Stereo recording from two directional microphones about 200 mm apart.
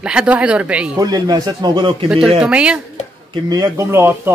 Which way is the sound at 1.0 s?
20° right (ahead or behind).